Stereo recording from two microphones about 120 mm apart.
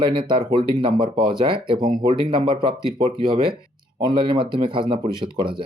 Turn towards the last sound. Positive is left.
turn(degrees=-45)  # may be behind; listen again after turning